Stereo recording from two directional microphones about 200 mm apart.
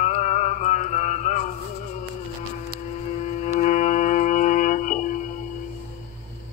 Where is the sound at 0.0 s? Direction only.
35° left (ahead or behind).